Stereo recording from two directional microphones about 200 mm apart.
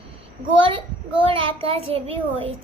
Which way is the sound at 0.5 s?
25° right (ahead or behind).